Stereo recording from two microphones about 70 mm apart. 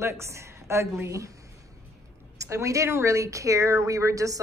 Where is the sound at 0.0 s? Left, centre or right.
Right.